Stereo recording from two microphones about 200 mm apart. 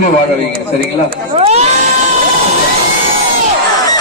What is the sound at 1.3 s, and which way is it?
Speech, 35° right (ahead or behind).